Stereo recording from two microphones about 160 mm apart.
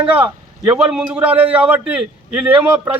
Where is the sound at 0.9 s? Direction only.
5° right (ahead or behind).